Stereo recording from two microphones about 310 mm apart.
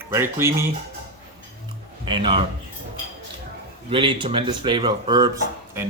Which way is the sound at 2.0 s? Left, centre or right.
Centre.